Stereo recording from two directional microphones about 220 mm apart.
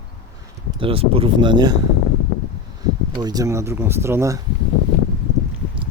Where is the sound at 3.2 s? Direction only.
15° right (ahead or behind).